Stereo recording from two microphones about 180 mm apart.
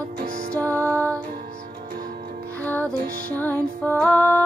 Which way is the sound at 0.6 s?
10° left (ahead or behind).